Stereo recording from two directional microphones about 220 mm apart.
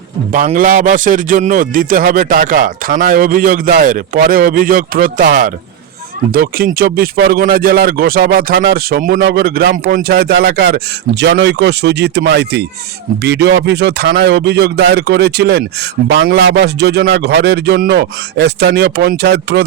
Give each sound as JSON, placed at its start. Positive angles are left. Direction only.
{"t": 0.3, "sound": "a man's voice", "side_deg": -40}